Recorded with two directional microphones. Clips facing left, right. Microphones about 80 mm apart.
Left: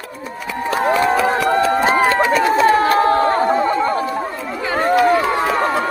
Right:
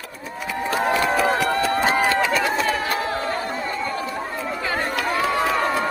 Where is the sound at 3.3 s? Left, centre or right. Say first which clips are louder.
Left 10 dB; left.